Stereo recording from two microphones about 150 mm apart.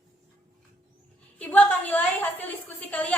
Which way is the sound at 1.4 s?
10° left (ahead or behind).